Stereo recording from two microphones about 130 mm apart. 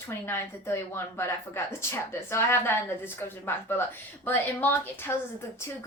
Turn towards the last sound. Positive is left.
turn(degrees=20)  # may be behind; listen again after turning